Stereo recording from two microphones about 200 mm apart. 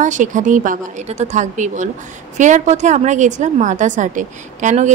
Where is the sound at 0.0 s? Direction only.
40° right (ahead or behind).